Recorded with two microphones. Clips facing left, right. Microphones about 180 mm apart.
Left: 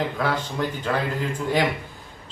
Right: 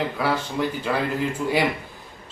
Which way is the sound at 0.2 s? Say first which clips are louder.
Right 1 dB; 10° right (ahead or behind).